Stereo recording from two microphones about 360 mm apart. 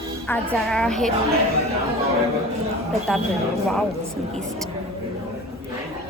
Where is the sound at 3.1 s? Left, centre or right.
Centre.